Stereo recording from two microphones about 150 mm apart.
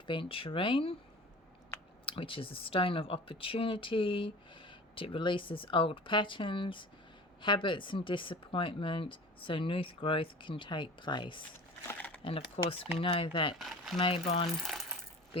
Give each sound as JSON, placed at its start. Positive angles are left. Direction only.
{"t": 0.1, "sound": "speech", "side_deg": 35}
{"t": 2.0, "sound": "speech", "side_deg": 35}
{"t": 11.9, "sound": "a sound", "side_deg": 10}
{"t": 12.6, "sound": "speech", "side_deg": 40}
{"t": 13.6, "sound": "speech", "side_deg": 0}
{"t": 14.0, "sound": "speech", "side_deg": 40}
{"t": 14.6, "sound": "coin", "side_deg": 0}